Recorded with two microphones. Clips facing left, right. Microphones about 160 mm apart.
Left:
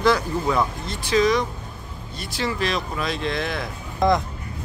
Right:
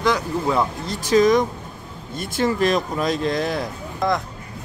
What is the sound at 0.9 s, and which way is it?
Speech, 45° right (ahead or behind).